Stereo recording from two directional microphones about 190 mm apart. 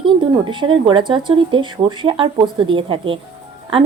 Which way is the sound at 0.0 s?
25° right (ahead or behind).